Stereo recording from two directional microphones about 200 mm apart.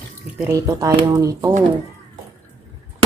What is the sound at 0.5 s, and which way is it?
Speech, 15° right (ahead or behind).